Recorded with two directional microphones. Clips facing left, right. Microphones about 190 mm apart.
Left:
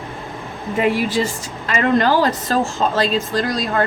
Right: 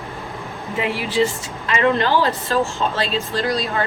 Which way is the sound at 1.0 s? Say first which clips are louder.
Even; 40° left (ahead or behind).